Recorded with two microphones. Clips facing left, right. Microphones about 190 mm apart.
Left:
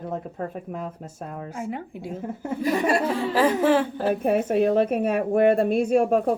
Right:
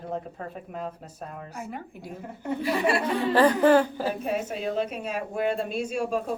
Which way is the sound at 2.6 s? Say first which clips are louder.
Left 3 dB; 45° left (ahead or behind).